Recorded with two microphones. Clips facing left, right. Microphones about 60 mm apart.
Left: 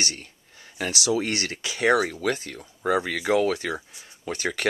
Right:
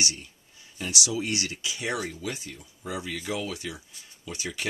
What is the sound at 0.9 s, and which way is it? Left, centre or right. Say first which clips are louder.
Speech: left 4 dB; left.